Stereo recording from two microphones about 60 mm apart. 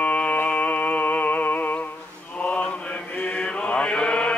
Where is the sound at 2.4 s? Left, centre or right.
Left.